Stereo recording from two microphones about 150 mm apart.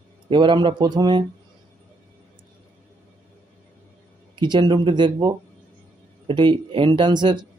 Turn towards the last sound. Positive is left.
turn(degrees=-30)  # may be behind; listen again after turning